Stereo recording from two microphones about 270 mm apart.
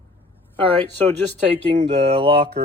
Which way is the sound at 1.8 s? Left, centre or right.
Right.